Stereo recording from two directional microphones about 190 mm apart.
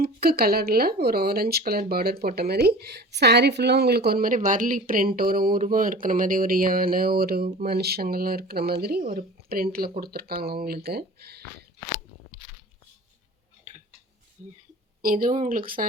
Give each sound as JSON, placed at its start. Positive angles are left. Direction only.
{"t": 0.0, "sound": "speech", "side_deg": -55}
{"t": 13.7, "sound": "a sound", "side_deg": -40}
{"t": 15.0, "sound": "speech", "side_deg": -45}